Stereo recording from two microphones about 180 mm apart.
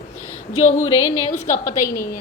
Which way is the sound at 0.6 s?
40° left (ahead or behind).